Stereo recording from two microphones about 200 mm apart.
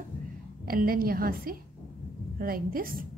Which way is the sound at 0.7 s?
45° right (ahead or behind).